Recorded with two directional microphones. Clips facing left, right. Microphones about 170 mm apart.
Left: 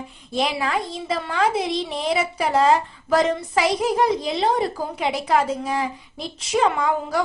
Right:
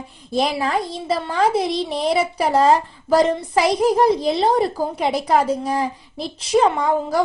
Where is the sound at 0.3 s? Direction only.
40° right (ahead or behind).